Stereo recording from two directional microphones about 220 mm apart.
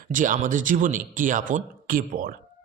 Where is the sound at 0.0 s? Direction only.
35° right (ahead or behind).